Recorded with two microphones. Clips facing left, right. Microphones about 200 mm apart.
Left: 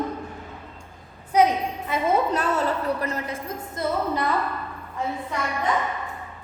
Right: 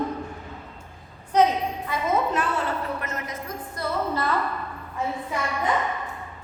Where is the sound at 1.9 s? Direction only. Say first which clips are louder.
Left 5 dB; 25° left (ahead or behind).